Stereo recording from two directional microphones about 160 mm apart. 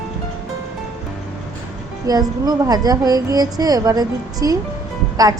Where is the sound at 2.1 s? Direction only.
25° right (ahead or behind).